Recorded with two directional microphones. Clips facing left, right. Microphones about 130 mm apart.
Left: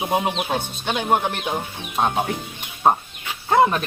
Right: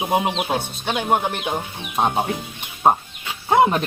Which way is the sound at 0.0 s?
10° right (ahead or behind).